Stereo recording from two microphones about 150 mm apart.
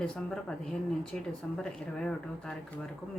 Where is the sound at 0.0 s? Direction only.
5° left (ahead or behind).